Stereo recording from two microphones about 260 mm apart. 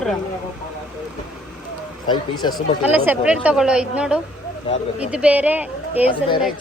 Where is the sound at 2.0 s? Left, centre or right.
Centre.